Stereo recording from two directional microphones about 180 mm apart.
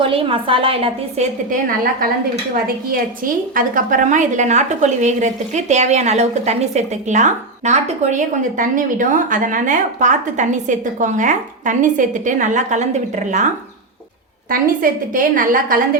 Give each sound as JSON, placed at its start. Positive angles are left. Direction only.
{"t": 0.0, "sound": "a woman's voice", "side_deg": -30}
{"t": 1.5, "sound": "a woman's voice", "side_deg": -50}
{"t": 3.5, "sound": "a woman's voice", "side_deg": -50}
{"t": 14.5, "sound": "a woman's voice", "side_deg": -50}